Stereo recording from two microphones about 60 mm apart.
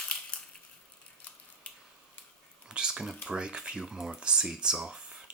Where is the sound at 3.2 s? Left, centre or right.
Centre.